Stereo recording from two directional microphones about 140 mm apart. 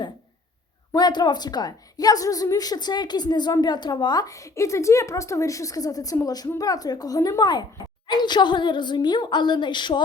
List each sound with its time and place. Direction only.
0.9 s a woman's voice: 30° left (ahead or behind)